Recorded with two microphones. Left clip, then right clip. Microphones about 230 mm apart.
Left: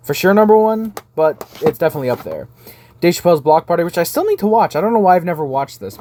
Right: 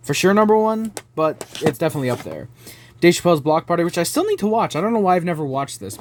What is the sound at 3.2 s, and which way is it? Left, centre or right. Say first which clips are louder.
Speech: left 5 dB; right.